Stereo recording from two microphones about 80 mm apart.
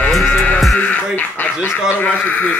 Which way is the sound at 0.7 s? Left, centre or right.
Centre.